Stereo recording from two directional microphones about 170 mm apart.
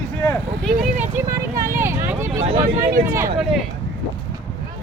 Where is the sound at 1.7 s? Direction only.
15° right (ahead or behind).